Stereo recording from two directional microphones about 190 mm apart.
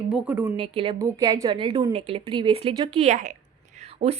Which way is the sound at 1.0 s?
15° right (ahead or behind).